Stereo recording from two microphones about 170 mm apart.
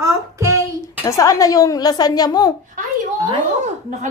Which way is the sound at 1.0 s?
20° left (ahead or behind).